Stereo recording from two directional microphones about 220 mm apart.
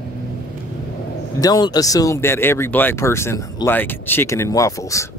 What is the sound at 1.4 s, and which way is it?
Speech, 15° left (ahead or behind).